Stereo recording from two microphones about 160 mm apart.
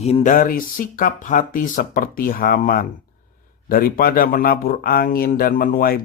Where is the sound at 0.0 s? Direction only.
45° left (ahead or behind).